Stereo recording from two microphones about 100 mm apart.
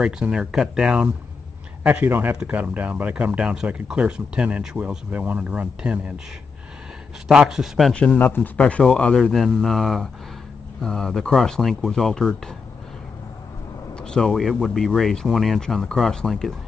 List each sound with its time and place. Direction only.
0.0 s speech: 10° right (ahead or behind)
7.2 s speech: 5° right (ahead or behind)
7.9 s speech: 10° left (ahead or behind)
8.2 s speech: 20° left (ahead or behind); by 12.3 s 5° left (ahead or behind)
13.9 s speech: 5° left (ahead or behind)